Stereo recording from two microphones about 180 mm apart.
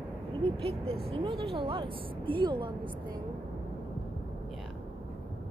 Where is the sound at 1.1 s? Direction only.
30° right (ahead or behind).